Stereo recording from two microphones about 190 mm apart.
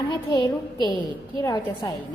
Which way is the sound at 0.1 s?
20° left (ahead or behind).